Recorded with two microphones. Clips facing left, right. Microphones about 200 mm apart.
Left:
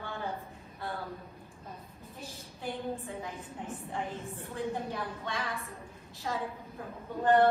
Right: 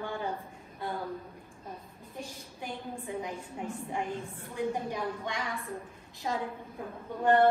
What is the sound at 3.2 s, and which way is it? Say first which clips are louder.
A woman's voice: right 4 dB; 15° right (ahead or behind).